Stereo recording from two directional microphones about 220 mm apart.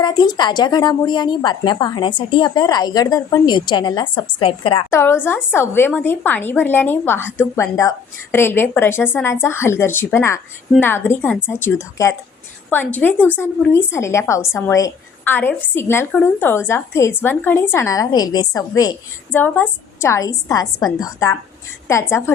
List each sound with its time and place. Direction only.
0.0 s a woman's voice: 20° left (ahead or behind)
4.9 s a woman's voice: 10° left (ahead or behind)